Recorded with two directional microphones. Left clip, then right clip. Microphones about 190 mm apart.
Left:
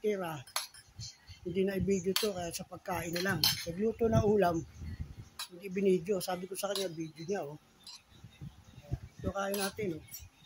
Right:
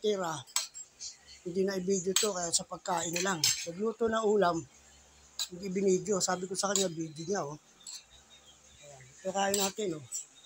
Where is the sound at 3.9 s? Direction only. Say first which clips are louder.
Right 1 dB; 25° left (ahead or behind).